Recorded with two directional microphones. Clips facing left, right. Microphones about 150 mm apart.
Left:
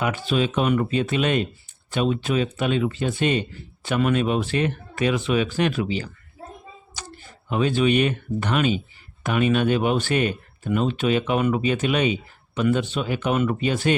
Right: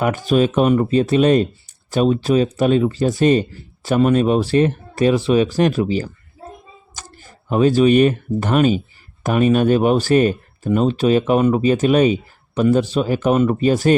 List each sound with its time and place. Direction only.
0.0 s speech: 45° right (ahead or behind)